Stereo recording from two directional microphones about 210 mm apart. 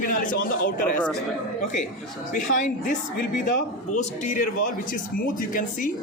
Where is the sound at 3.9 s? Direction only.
35° left (ahead or behind).